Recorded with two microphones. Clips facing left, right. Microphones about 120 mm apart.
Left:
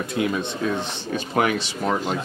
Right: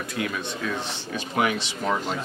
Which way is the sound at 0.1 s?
25° left (ahead or behind).